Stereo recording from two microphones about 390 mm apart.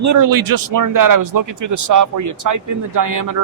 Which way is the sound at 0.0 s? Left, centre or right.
Right.